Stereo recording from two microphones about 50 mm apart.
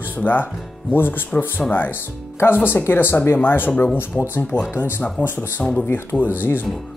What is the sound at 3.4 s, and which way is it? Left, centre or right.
Speech, left.